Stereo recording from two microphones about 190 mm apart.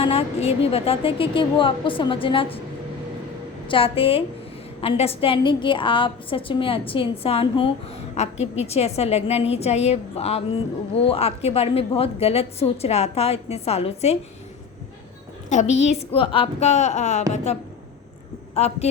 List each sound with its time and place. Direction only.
0.0 s a woman's voice: 30° left (ahead or behind)
3.7 s a woman's voice: 30° left (ahead or behind)
15.4 s a woman's voice: 35° left (ahead or behind)